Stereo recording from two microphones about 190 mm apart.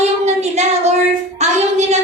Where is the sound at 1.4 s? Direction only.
35° right (ahead or behind).